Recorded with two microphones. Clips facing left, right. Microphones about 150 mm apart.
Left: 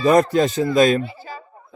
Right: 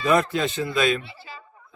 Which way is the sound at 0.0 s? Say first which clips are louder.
Left 6 dB; 40° left (ahead or behind).